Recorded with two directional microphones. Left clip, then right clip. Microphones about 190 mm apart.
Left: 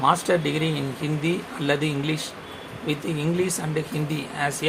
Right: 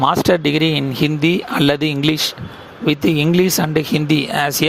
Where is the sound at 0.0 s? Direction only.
50° right (ahead or behind).